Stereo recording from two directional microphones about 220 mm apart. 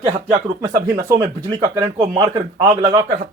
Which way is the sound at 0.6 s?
15° right (ahead or behind).